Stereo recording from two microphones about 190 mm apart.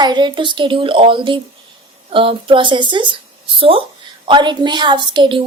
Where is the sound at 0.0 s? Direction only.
25° right (ahead or behind).